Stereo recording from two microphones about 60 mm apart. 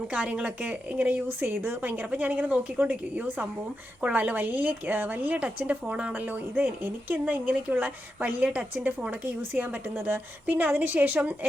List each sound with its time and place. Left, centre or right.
0.1 s a woman's voice: centre
6.1 s a woman's voice: right